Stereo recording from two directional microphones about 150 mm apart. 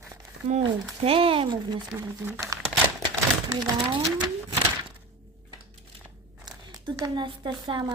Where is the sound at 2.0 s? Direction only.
15° right (ahead or behind).